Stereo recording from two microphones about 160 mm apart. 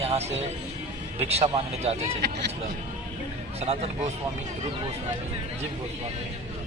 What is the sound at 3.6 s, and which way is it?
Speech, 45° right (ahead or behind).